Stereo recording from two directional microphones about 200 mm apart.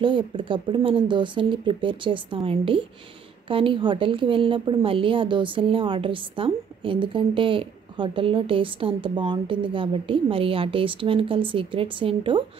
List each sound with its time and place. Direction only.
0.0 s a woman's voice: 25° right (ahead or behind)